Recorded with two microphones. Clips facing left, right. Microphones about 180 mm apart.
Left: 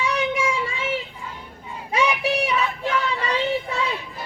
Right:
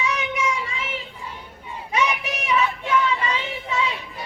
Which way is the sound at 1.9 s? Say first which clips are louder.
Left 3 dB; 35° left (ahead or behind).